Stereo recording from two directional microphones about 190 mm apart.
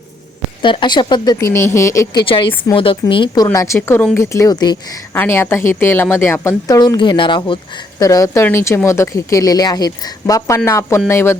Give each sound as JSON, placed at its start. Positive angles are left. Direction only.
{"t": 0.6, "sound": "speech", "side_deg": 25}
{"t": 2.2, "sound": "speech", "side_deg": 25}
{"t": 5.1, "sound": "a woman's voice", "side_deg": 10}